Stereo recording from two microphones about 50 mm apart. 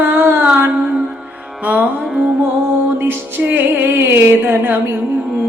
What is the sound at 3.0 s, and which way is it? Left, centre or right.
Music, right.